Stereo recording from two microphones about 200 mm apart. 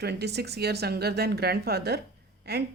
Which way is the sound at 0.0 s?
55° right (ahead or behind).